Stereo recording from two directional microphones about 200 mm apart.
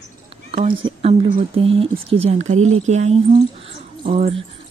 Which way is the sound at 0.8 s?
30° right (ahead or behind).